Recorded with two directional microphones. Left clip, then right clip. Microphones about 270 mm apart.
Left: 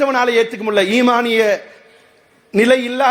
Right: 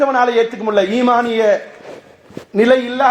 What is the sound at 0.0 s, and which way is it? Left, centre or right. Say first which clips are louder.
Speech: right 1 dB; left.